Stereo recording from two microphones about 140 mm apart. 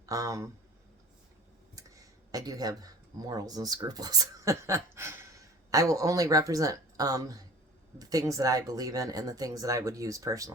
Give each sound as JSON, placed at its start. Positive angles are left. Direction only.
{"t": 0.0, "sound": "speech", "side_deg": -25}
{"t": 2.3, "sound": "speech", "side_deg": -25}